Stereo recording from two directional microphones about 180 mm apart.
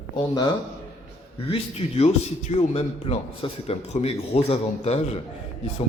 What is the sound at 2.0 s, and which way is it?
Speech, 35° left (ahead or behind).